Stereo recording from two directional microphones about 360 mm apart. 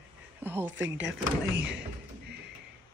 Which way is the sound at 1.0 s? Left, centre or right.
Right.